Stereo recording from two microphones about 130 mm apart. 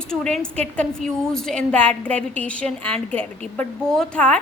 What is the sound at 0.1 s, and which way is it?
A woman's voice, 5° left (ahead or behind).